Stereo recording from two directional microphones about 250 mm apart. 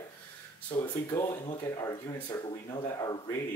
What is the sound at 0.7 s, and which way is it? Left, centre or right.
Speech, centre.